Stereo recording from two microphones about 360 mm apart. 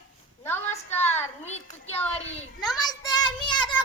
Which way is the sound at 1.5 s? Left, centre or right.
Centre.